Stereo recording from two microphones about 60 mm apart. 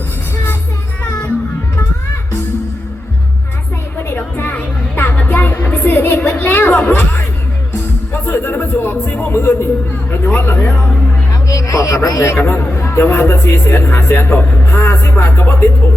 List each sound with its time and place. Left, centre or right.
4.1 s a sound: left
5.2 s music: left
6.3 s a sound: left
8.4 s a sound: left
9.0 s music: left
9.3 s speech: left
11.4 s speech: left
12.2 s a man's voice: left
13.7 s speech: left